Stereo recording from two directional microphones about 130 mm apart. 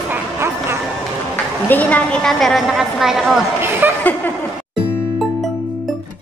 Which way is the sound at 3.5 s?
15° right (ahead or behind).